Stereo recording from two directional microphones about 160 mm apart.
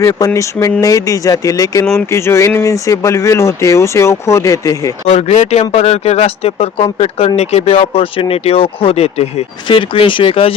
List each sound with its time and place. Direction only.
0.0 s speech: 20° left (ahead or behind)
5.0 s speech: 40° left (ahead or behind)